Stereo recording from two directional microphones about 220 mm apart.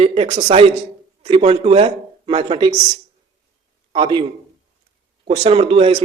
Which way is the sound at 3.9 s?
20° right (ahead or behind).